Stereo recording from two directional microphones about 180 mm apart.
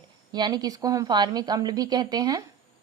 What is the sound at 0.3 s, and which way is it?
A woman's voice, 25° right (ahead or behind).